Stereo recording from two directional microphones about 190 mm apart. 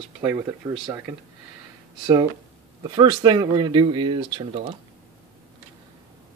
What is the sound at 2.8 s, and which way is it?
Speech, 25° right (ahead or behind).